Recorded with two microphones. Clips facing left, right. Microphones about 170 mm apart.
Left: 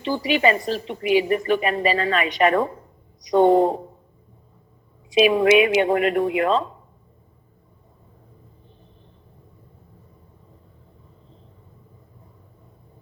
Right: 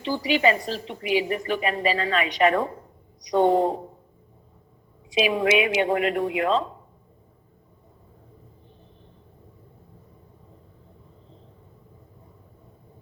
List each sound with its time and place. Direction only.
0.3 s a woman's voice: 55° left (ahead or behind)
5.1 s a woman's voice: 55° left (ahead or behind)